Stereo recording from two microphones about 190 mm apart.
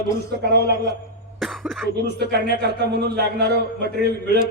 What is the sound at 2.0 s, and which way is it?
Speech, 60° right (ahead or behind).